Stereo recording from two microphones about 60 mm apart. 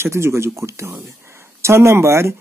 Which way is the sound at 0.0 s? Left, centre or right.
Right.